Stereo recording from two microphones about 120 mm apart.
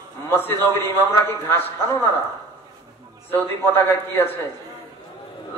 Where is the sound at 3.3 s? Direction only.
15° left (ahead or behind).